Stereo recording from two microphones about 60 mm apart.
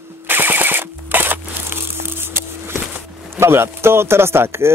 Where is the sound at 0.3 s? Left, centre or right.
Right.